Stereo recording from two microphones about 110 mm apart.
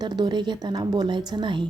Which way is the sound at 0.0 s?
40° right (ahead or behind).